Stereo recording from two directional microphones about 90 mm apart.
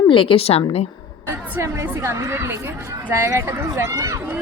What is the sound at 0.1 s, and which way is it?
Speech, 75° left (ahead or behind).